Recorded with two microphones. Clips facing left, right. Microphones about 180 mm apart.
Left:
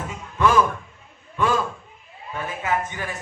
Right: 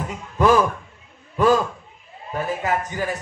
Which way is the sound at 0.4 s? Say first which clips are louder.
Right 2 dB; 35° right (ahead or behind).